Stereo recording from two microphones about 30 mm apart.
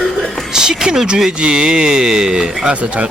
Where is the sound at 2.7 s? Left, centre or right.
Right.